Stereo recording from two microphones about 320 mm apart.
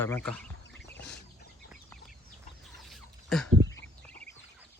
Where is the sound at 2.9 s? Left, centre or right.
Centre.